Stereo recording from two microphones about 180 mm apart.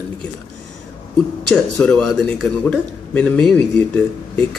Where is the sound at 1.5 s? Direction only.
5° left (ahead or behind).